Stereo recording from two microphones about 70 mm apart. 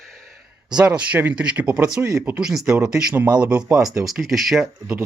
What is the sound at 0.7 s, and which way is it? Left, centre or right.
Speech, centre.